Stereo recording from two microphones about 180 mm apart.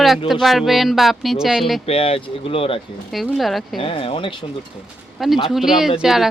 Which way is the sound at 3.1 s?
Centre (ahead or behind).